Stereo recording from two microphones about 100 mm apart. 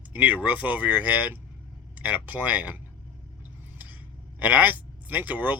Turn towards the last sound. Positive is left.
turn(degrees=-15)  # may be behind; listen again after turning